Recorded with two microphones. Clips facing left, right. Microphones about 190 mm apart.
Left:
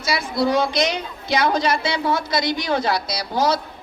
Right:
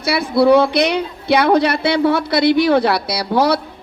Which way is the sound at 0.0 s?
60° right (ahead or behind).